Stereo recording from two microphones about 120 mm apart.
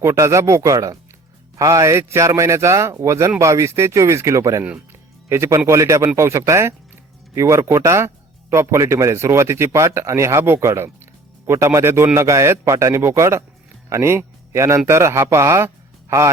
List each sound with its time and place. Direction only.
0.0 s speech: 25° right (ahead or behind)
4.6 s speech: 15° right (ahead or behind)